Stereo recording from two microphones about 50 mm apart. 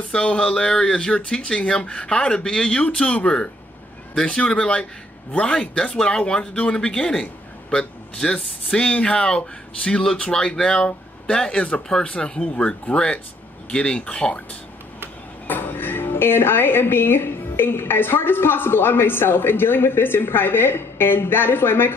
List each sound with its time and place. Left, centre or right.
0.1 s a man's voice: left
8.6 s speech: left
15.4 s speech: left